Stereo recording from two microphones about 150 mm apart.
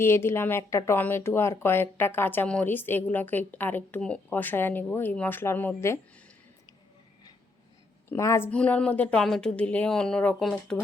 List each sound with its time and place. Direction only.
0.0 s speech: 15° left (ahead or behind)
8.1 s a woman's voice: 20° left (ahead or behind)
8.4 s speech: 10° left (ahead or behind)